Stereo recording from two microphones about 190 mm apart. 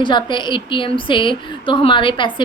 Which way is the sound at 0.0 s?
25° left (ahead or behind).